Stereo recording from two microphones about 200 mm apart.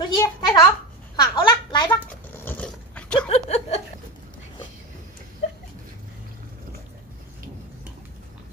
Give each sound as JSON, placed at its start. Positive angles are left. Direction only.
{"t": 0.0, "sound": "a sound", "side_deg": 20}
{"t": 1.9, "sound": "dog", "side_deg": 10}
{"t": 3.3, "sound": "chuckle", "side_deg": 30}